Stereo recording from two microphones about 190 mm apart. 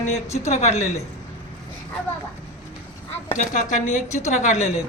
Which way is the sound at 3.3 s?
40° left (ahead or behind).